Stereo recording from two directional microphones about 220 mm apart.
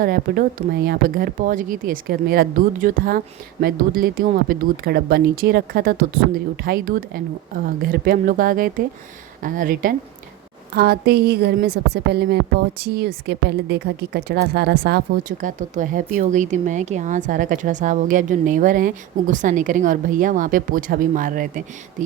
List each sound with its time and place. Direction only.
0.0 s a woman's voice: 40° right (ahead or behind)